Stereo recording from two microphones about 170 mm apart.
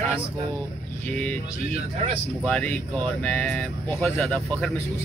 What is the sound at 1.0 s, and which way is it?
Speech, 10° left (ahead or behind).